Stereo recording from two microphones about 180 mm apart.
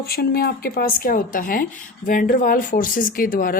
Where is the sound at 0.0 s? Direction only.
60° left (ahead or behind).